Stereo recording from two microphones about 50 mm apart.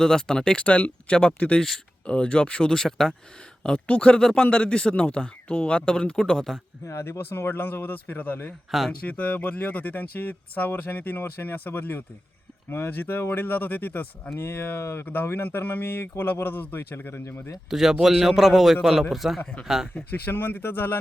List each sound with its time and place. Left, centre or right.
0.0 s speech: centre
3.8 s speech: left
4.2 s speech: centre
4.4 s speech: left
6.8 s speech: left
14.8 s speech: left
15.0 s speech: left
17.7 s a man's voice: centre
20.2 s speech: left